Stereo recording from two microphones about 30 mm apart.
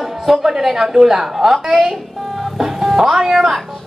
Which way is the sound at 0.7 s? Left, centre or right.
Centre.